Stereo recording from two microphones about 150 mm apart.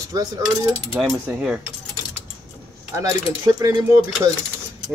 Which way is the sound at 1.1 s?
10° right (ahead or behind).